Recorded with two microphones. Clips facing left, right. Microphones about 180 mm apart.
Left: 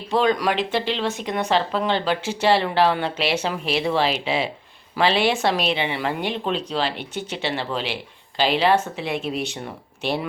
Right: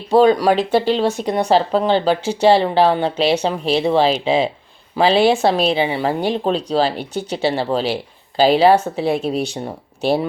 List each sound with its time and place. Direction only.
0.1 s speech: 35° right (ahead or behind)